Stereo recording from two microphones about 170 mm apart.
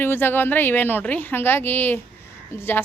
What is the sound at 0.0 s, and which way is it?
A woman's voice, 10° left (ahead or behind).